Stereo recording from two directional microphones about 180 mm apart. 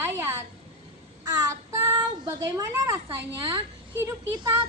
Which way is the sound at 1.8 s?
20° right (ahead or behind).